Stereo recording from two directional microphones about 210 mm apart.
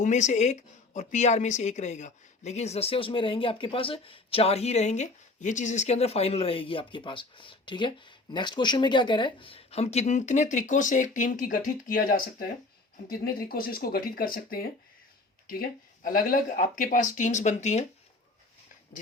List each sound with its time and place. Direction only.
0.0 s a woman's voice: 35° left (ahead or behind)